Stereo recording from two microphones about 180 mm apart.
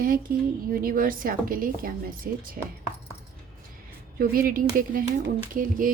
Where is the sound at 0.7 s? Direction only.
50° right (ahead or behind).